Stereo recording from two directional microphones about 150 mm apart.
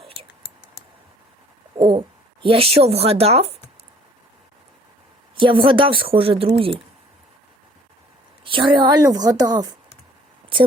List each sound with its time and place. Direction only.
1.8 s speech: 35° right (ahead or behind)
5.4 s a woman's voice: 35° right (ahead or behind)
8.4 s a woman's voice: 35° right (ahead or behind)